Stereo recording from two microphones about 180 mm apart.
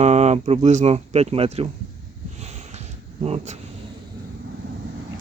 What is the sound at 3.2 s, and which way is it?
Speech, 35° right (ahead or behind).